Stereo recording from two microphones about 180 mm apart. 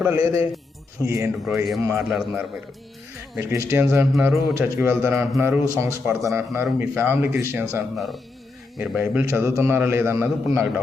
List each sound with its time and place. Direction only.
0.0 s a man's voice: 15° right (ahead or behind)
2.0 s a man's voice: centre (ahead or behind)
3.3 s a man's voice: 15° right (ahead or behind)
7.9 s a man's voice: centre (ahead or behind)